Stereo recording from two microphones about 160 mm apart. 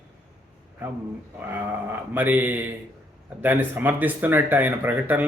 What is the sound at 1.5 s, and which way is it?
Speech, 10° right (ahead or behind).